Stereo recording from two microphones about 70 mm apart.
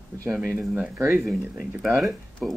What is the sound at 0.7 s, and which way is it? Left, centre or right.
Speech, right.